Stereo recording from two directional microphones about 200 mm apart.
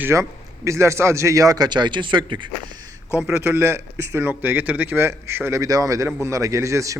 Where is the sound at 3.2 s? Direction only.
10° right (ahead or behind).